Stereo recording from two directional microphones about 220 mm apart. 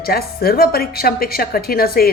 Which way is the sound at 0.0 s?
45° left (ahead or behind).